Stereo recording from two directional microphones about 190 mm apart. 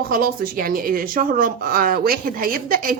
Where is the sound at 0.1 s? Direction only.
50° right (ahead or behind).